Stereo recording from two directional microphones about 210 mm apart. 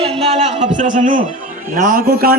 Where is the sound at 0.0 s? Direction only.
30° right (ahead or behind).